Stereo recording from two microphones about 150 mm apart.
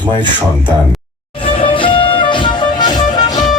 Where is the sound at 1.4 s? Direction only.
40° left (ahead or behind).